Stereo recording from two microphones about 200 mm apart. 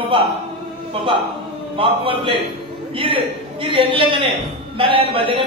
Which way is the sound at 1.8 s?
25° right (ahead or behind).